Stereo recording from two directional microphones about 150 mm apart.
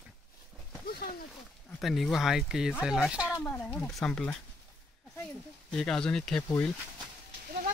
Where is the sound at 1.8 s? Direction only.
Centre (ahead or behind).